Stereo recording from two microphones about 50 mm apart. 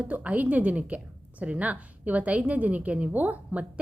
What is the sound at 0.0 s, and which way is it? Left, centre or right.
A woman's voice, right.